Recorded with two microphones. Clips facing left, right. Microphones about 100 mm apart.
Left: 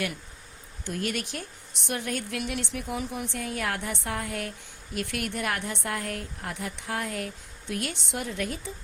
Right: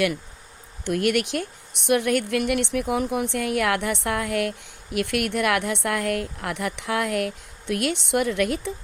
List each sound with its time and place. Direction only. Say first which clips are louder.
0.9 s a woman's voice: right 9 dB; 65° right (ahead or behind)